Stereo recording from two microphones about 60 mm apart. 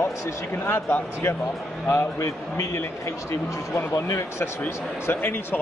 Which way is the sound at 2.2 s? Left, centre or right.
Left.